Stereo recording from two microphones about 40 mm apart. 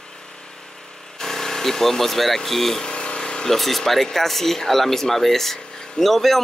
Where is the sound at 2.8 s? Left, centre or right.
Left.